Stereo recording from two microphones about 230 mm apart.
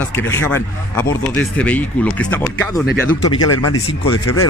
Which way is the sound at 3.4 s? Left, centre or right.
Left.